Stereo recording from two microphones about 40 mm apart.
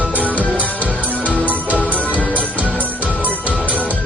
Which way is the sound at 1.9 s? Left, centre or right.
Left.